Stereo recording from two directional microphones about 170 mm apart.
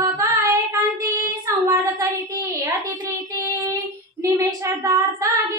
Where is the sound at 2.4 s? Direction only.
20° right (ahead or behind).